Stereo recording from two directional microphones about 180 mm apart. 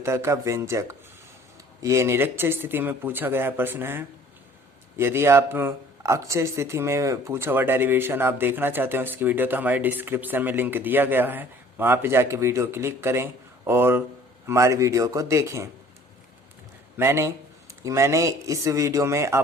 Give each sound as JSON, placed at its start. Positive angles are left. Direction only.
{"t": 0.0, "sound": "speech", "side_deg": -15}
{"t": 17.0, "sound": "speech", "side_deg": -15}